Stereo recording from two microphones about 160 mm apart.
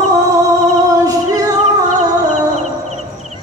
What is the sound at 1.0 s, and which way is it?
Music, 20° right (ahead or behind).